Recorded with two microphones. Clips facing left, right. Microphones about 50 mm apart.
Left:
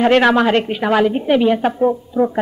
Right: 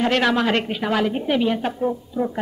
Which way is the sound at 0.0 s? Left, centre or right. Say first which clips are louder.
Left 7 dB; centre.